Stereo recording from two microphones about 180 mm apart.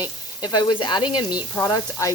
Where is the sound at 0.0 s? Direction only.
25° left (ahead or behind).